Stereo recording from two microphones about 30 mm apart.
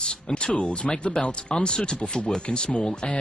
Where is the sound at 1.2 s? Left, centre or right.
Centre.